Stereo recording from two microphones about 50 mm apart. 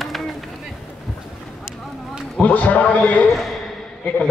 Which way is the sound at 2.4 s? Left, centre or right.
Left.